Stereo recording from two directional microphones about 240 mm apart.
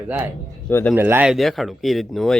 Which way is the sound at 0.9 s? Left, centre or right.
Centre.